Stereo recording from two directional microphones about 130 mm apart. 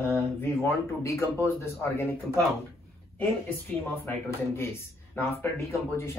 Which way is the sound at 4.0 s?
20° left (ahead or behind).